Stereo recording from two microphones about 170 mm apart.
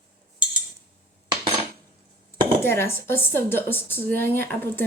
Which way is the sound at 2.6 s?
15° left (ahead or behind).